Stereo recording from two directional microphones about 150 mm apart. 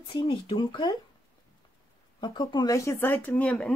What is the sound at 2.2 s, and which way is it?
Speech, 30° left (ahead or behind).